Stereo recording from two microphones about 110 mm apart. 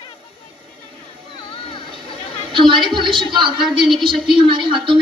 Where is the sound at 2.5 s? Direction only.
45° right (ahead or behind).